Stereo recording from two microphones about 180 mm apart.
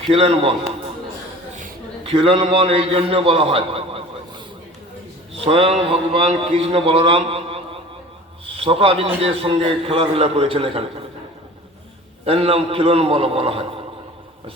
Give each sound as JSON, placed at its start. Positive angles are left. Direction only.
{"t": 0.0, "sound": "speech", "side_deg": -30}
{"t": 2.0, "sound": "a man's voice", "side_deg": -30}
{"t": 12.2, "sound": "a man's voice", "side_deg": -35}